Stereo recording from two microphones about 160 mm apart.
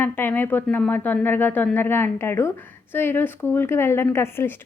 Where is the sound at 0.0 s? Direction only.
15° left (ahead or behind).